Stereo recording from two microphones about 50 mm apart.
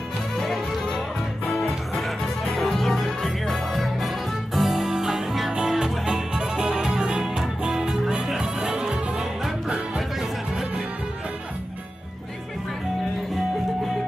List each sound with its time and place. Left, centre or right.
0.4 s music: centre